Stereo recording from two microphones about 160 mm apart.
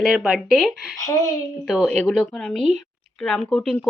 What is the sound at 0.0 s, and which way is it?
Speech, centre (ahead or behind).